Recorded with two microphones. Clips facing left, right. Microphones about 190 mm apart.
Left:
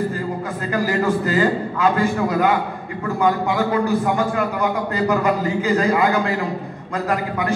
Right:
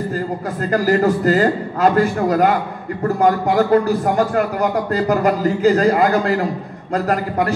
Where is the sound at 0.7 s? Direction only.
40° right (ahead or behind).